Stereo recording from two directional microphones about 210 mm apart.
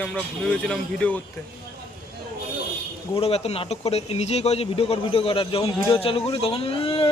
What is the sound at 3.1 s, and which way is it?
Speech, 30° left (ahead or behind).